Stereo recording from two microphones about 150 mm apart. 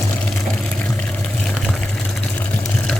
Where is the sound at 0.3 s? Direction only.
5° left (ahead or behind).